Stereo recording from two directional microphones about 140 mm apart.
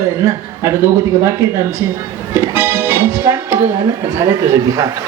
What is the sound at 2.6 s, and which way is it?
Music, 15° right (ahead or behind).